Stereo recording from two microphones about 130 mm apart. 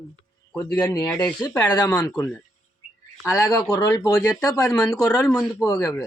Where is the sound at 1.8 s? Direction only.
15° left (ahead or behind).